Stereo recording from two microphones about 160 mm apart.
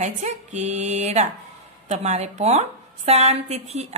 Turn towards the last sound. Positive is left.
turn(degrees=-45)  # may be behind; listen again after turning